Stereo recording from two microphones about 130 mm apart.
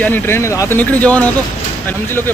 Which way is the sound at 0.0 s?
15° left (ahead or behind).